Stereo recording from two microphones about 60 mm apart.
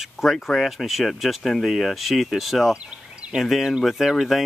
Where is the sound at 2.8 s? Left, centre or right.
Centre.